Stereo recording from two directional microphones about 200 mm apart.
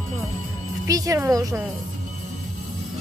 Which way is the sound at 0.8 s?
15° right (ahead or behind).